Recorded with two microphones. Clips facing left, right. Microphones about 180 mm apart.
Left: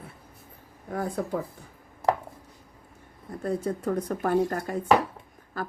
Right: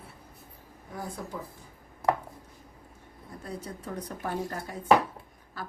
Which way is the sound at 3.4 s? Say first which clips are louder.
Left 11 dB; 50° left (ahead or behind).